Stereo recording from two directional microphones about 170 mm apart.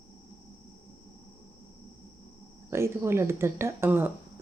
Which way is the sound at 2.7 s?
15° right (ahead or behind).